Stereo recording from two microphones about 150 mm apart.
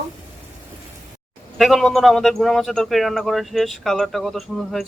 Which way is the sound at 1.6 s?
Centre (ahead or behind).